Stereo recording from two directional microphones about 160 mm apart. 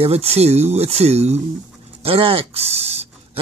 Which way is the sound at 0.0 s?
40° right (ahead or behind).